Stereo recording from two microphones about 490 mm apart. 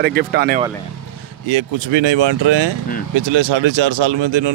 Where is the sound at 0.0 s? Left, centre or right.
Centre.